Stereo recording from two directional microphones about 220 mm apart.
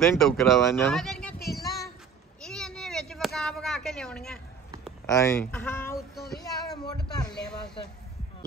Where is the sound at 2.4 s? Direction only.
5° left (ahead or behind).